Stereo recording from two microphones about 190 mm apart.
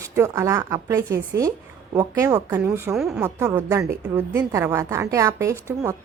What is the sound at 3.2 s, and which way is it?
A woman's voice, 15° right (ahead or behind).